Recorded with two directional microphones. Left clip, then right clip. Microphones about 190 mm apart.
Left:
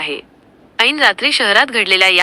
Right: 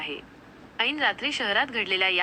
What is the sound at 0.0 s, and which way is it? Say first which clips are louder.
A woman's voice: left 12 dB; 35° left (ahead or behind).